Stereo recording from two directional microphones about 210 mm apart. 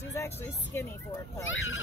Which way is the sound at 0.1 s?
15° left (ahead or behind).